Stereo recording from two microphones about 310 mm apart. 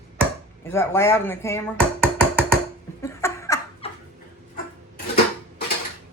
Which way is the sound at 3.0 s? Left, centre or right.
Centre.